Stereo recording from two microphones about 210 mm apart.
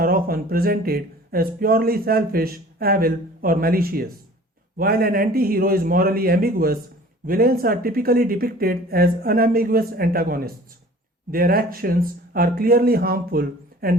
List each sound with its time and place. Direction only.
0.0 s speech: 45° right (ahead or behind)